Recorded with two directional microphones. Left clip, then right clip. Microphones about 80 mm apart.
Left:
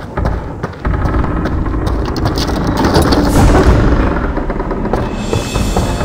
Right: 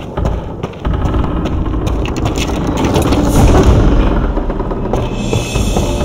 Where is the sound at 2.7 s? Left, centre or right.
Left.